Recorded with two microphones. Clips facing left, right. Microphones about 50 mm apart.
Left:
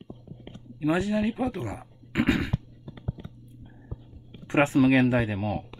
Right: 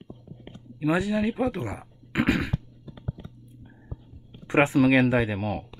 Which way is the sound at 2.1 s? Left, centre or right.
Right.